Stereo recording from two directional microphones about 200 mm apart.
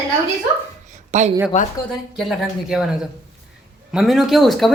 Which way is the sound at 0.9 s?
35° right (ahead or behind).